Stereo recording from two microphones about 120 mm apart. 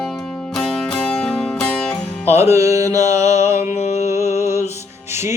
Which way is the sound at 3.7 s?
65° left (ahead or behind).